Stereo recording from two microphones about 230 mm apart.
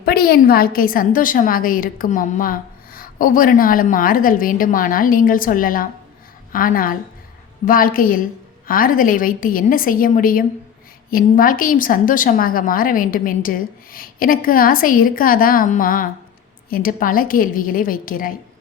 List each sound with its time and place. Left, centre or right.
0.0 s a woman's voice: left